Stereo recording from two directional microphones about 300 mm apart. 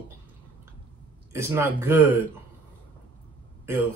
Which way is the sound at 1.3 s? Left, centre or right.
Centre.